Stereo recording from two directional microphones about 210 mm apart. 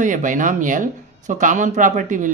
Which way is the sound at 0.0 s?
40° right (ahead or behind).